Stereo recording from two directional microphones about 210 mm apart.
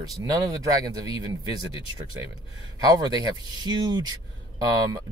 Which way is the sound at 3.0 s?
20° right (ahead or behind).